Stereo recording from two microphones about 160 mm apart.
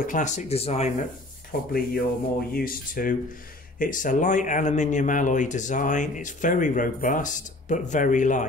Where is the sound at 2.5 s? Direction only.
65° left (ahead or behind).